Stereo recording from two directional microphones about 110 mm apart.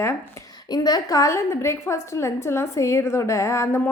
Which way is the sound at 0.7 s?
35° left (ahead or behind).